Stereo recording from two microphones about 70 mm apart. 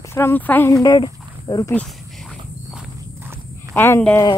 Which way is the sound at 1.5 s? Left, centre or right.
Left.